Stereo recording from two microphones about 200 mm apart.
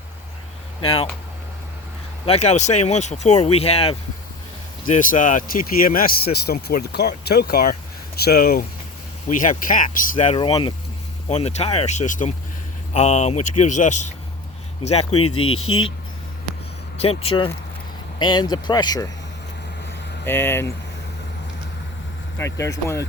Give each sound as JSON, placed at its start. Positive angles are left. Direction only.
{"t": 2.2, "sound": "speech", "side_deg": 30}
{"t": 4.9, "sound": "speech", "side_deg": 40}
{"t": 15.1, "sound": "speech", "side_deg": 90}
{"t": 17.0, "sound": "speech", "side_deg": 30}
{"t": 20.2, "sound": "speech", "side_deg": 10}
{"t": 22.4, "sound": "speech", "side_deg": 15}